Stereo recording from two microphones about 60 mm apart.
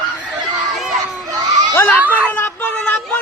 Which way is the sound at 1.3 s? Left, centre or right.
Right.